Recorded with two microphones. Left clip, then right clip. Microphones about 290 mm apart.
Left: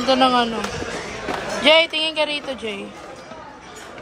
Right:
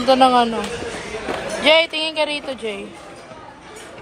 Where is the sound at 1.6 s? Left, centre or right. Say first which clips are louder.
Even; centre.